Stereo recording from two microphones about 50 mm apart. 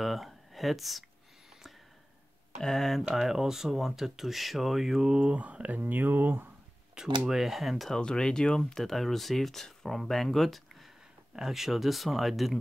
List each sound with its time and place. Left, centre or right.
0.0 s speech: centre
2.6 s speech: centre
3.2 s speech: centre
5.0 s speech: centre; by 6.5 s right
7.0 s speech: centre
7.9 s speech: centre